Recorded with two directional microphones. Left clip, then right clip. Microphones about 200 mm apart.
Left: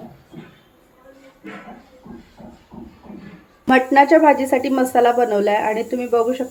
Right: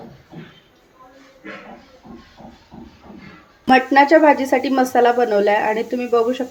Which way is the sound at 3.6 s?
5° right (ahead or behind).